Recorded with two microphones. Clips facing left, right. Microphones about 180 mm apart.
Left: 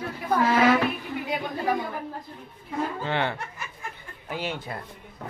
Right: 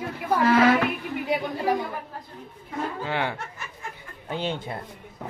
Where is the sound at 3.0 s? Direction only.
10° right (ahead or behind).